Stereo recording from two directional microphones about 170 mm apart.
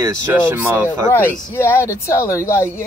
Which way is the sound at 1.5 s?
10° left (ahead or behind).